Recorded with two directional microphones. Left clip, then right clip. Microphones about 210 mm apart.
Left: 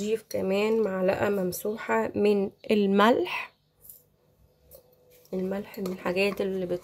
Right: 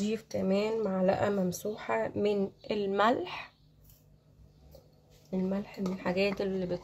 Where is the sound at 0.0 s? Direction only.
40° left (ahead or behind).